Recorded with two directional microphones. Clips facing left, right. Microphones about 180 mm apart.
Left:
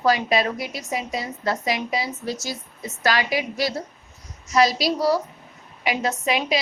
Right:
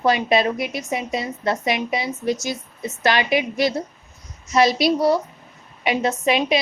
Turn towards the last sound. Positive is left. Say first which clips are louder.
# right 4 dB
turn(degrees=-25)  # may be behind; listen again after turning